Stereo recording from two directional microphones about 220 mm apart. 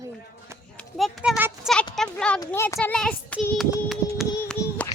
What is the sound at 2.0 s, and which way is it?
A child's voice, 5° left (ahead or behind).